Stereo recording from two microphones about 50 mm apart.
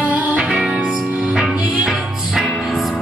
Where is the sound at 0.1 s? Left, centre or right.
Right.